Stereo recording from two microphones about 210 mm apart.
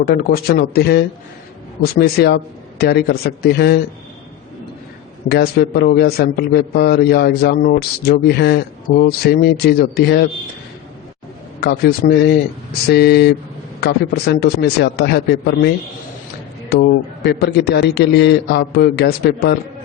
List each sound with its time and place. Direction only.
0.1 s a man's voice: 45° left (ahead or behind)
5.3 s a man's voice: 50° left (ahead or behind)
11.6 s a man's voice: 45° left (ahead or behind)
17.4 s a man's voice: 50° left (ahead or behind)